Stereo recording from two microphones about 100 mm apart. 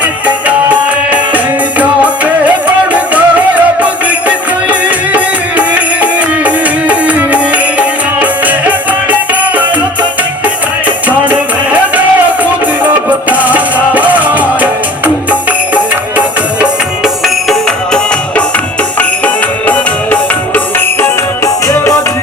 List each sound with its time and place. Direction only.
0.0 s music: 15° right (ahead or behind)
11.3 s music: 15° right (ahead or behind)
17.2 s music: 5° left (ahead or behind); by 21.9 s 30° left (ahead or behind)